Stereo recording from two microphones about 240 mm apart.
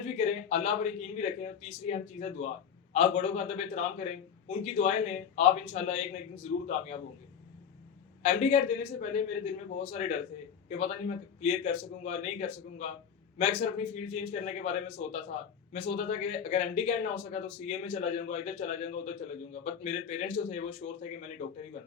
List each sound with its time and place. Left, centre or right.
0.2 s a man's voice: left
8.2 s a man's voice: left